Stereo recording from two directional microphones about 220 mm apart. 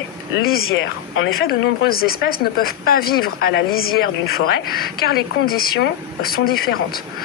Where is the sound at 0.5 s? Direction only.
45° left (ahead or behind).